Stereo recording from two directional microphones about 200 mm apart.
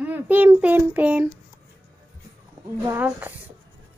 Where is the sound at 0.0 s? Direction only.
10° right (ahead or behind).